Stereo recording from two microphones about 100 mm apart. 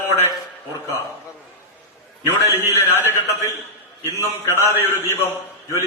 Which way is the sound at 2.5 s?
20° right (ahead or behind).